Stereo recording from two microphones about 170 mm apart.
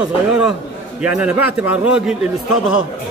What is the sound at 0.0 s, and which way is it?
A man's voice, 5° right (ahead or behind).